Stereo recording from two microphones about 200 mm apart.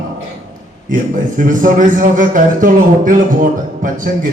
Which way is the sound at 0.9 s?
40° right (ahead or behind).